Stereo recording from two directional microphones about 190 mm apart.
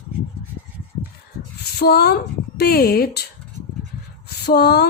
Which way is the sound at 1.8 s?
55° left (ahead or behind).